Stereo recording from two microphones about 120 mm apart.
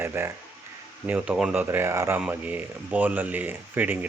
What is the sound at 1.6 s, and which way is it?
Speech, 20° right (ahead or behind).